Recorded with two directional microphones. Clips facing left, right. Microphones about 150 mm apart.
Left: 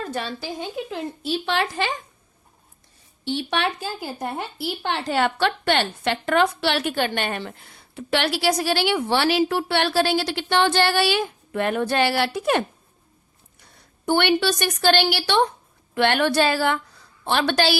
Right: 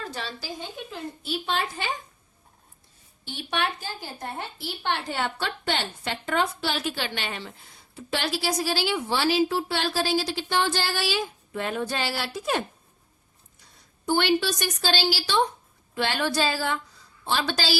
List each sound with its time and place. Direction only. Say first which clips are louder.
0.0 s a woman's voice: left 6 dB; 50° left (ahead or behind)
1.5 s a woman's voice: left 4 dB; 80° left
3.2 s a woman's voice: left 5 dB; 85° left
4.8 s a woman's voice: left 5 dB; 85° left; by 17.7 s 60° left (ahead or behind)